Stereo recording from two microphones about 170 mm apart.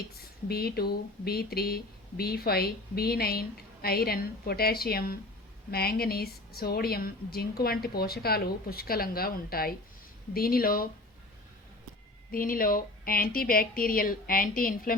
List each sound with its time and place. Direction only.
0.4 s speech: 65° left (ahead or behind)
12.3 s speech: 55° left (ahead or behind)